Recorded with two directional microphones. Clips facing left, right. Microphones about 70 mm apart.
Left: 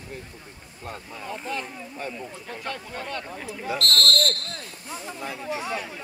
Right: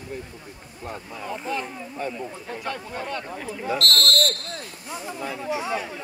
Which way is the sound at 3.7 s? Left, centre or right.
Centre.